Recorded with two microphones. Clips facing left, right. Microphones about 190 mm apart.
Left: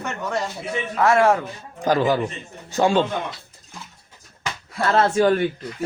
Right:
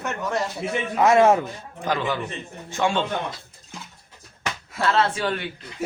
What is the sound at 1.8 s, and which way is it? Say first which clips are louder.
Speech: left 6 dB; 40° left (ahead or behind).